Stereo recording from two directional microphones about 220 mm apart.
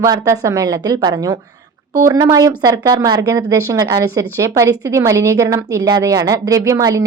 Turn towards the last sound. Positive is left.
turn(degrees=-15)  # may be behind; listen again after turning